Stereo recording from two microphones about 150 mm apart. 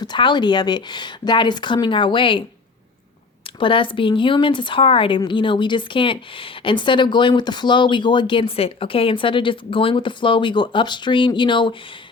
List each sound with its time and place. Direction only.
0.0 s a woman's voice: 30° left (ahead or behind)
3.6 s a woman's voice: 35° left (ahead or behind)